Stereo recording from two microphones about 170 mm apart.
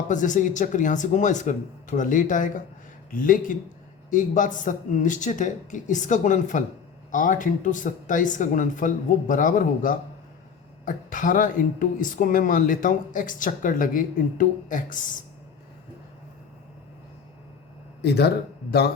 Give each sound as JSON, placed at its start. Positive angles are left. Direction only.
{"t": 0.1, "sound": "speech", "side_deg": 50}
{"t": 18.0, "sound": "speech", "side_deg": 75}